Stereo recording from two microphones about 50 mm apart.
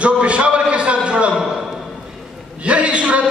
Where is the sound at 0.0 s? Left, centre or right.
Right.